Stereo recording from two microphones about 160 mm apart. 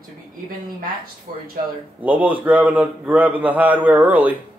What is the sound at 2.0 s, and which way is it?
A man's voice, 10° right (ahead or behind).